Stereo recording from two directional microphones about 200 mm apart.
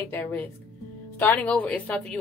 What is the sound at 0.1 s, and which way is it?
A woman's voice, 10° left (ahead or behind).